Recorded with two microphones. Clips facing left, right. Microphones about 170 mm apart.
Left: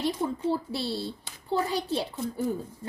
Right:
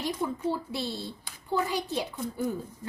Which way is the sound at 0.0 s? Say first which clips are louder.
Left 2 dB; 30° left (ahead or behind).